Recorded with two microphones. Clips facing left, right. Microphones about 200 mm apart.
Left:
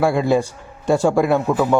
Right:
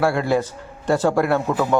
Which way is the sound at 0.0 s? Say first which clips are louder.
Left 2 dB; 15° left (ahead or behind).